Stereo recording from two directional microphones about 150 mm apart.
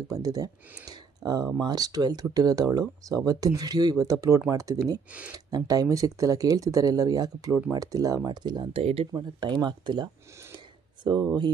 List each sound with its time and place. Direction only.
0.1 s speech: 25° right (ahead or behind)
8.8 s speech: 40° right (ahead or behind)